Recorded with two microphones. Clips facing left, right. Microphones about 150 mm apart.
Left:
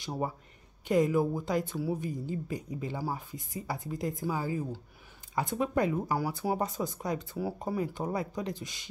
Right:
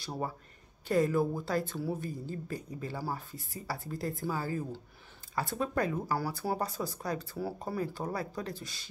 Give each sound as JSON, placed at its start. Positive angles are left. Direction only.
{"t": 0.0, "sound": "speech", "side_deg": 15}